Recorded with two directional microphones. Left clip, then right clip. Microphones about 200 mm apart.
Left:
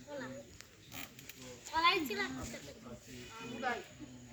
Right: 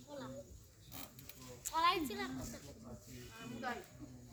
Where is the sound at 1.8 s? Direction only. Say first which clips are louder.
Left 3 dB; 45° right (ahead or behind).